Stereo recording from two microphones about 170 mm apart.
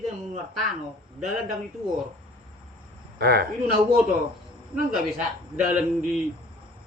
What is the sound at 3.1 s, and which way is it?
Speech, 65° right (ahead or behind).